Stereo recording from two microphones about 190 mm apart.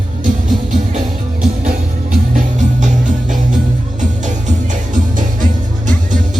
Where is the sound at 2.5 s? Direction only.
40° right (ahead or behind).